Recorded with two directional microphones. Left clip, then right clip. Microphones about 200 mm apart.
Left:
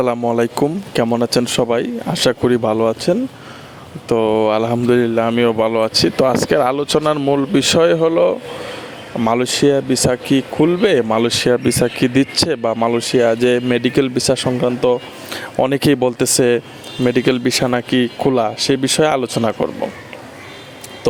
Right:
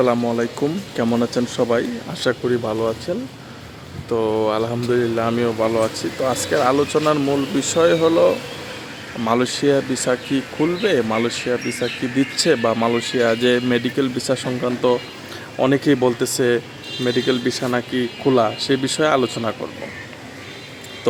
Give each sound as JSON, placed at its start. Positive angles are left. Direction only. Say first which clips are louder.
{"t": 0.0, "sound": "speech", "louder": "left 2 dB", "side_deg": 45}
{"t": 12.7, "sound": "speech", "louder": "left 4 dB", "side_deg": 25}